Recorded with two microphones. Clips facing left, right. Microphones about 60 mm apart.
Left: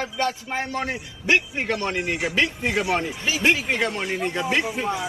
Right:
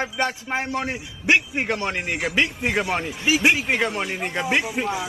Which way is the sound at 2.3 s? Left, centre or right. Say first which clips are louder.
Right 2 dB; centre.